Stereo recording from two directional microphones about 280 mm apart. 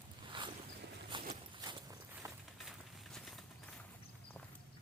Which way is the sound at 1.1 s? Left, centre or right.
Centre.